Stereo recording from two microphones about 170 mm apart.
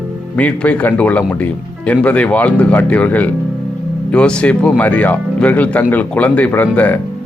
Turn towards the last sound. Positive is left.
turn(degrees=10)  # may be behind; listen again after turning